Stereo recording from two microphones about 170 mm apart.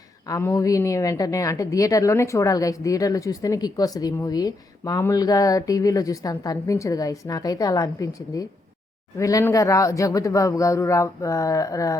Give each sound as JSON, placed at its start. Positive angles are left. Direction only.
{"t": 0.3, "sound": "a woman's voice", "side_deg": 20}